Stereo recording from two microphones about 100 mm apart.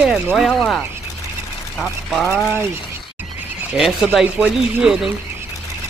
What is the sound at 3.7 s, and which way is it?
Speech, 5° right (ahead or behind).